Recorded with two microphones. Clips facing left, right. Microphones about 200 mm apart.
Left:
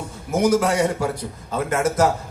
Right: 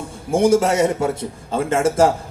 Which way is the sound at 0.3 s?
30° right (ahead or behind).